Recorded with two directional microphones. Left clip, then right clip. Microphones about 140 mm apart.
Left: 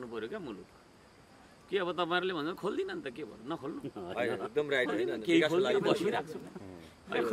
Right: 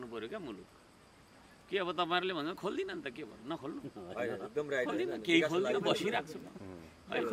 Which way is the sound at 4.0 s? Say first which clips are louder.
Left 5 dB; 30° left (ahead or behind).